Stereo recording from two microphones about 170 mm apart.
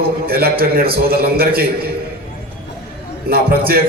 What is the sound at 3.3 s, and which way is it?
Speech, 60° right (ahead or behind).